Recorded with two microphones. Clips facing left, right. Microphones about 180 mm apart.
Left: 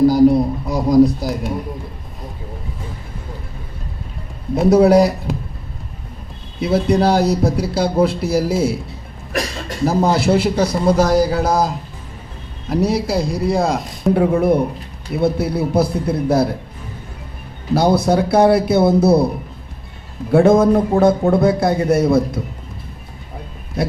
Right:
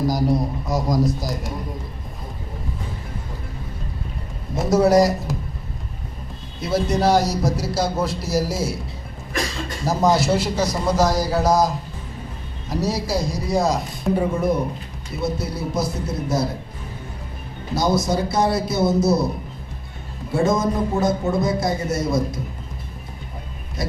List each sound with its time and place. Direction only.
0.1 s a man's voice: 60° left (ahead or behind)
4.5 s a man's voice: 60° left (ahead or behind)
6.6 s a man's voice: 60° left (ahead or behind)
17.7 s a man's voice: 60° left (ahead or behind)
20.3 s a man's voice: 60° left (ahead or behind)